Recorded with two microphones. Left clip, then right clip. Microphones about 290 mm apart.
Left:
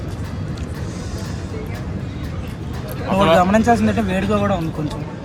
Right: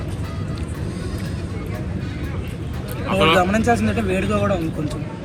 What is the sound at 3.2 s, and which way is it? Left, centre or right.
A man's voice, left.